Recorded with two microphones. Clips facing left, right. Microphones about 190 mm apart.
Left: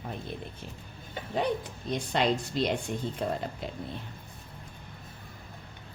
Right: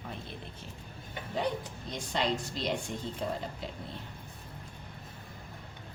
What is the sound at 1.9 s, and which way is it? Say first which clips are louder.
Speech: left 5 dB; 60° left (ahead or behind).